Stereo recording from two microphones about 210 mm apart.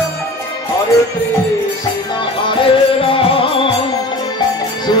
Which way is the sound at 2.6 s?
25° left (ahead or behind).